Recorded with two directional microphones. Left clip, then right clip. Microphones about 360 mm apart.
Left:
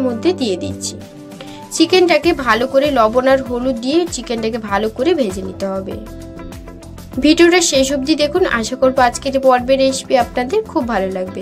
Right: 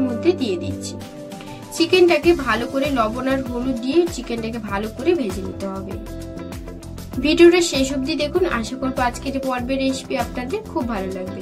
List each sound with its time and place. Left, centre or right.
0.2 s a woman's voice: left
1.9 s a woman's voice: left
7.2 s a woman's voice: left